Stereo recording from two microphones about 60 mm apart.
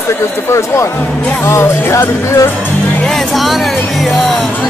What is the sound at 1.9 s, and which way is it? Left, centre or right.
Speech, left.